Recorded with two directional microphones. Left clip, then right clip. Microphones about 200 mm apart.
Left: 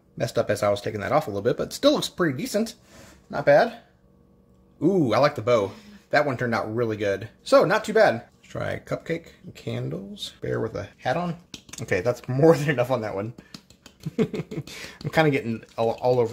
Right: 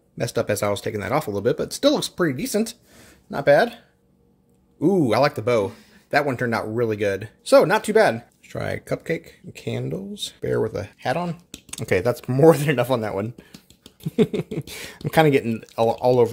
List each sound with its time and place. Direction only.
0.2 s speech: 30° right (ahead or behind)
4.7 s speech: 35° right (ahead or behind)